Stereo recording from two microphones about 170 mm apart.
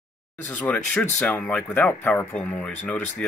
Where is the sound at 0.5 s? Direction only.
5° left (ahead or behind).